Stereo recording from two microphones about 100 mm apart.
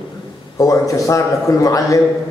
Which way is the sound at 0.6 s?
35° left (ahead or behind).